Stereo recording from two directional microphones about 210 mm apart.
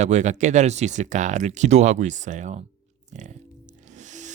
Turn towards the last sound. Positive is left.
turn(degrees=-35)  # may be behind; listen again after turning